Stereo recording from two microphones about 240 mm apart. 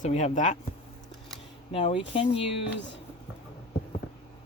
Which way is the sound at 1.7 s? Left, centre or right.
Left.